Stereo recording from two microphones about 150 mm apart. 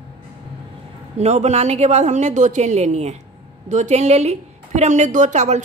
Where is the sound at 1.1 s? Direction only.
45° right (ahead or behind).